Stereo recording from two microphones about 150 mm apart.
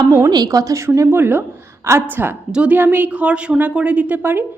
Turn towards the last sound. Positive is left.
turn(degrees=-15)  # may be behind; listen again after turning